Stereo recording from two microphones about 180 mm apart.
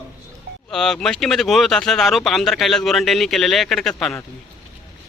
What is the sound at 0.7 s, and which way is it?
Speech, 5° left (ahead or behind).